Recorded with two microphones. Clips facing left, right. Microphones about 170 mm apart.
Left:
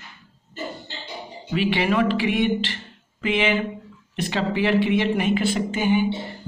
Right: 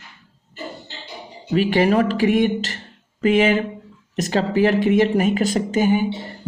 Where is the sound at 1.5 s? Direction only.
45° right (ahead or behind).